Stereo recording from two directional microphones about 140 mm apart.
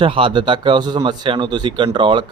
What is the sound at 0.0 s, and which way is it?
Speech, 40° right (ahead or behind).